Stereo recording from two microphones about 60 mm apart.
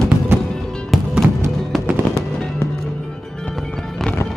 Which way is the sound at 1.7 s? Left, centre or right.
Centre.